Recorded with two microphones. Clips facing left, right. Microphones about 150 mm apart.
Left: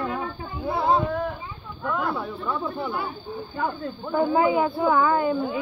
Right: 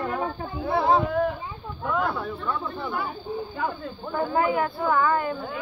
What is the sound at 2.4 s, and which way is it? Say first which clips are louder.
Speech: left 2 dB; 10° left (ahead or behind).